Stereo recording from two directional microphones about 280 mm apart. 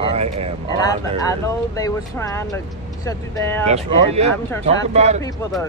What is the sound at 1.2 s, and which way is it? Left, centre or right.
Speech, centre.